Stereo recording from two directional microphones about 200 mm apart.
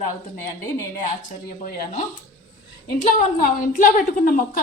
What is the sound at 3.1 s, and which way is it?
Speech, 40° left (ahead or behind).